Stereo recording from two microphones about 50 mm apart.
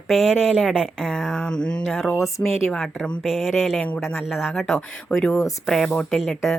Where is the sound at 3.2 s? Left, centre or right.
Centre.